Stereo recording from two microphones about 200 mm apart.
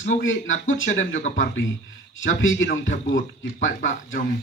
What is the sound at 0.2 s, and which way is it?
Speech, 75° left (ahead or behind).